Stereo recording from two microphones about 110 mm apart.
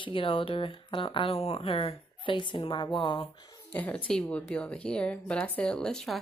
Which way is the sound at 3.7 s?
15° left (ahead or behind).